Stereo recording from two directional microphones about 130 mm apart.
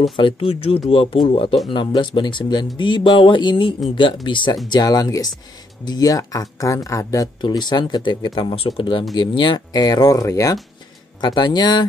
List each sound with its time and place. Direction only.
0.1 s speech: 45° left (ahead or behind)